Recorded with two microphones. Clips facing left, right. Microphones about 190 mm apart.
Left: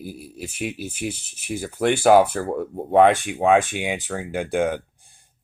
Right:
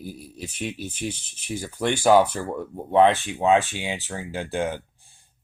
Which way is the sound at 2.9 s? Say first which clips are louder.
Left 2 dB; 60° left (ahead or behind).